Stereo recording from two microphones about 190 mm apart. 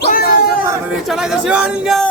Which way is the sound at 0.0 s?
55° left (ahead or behind).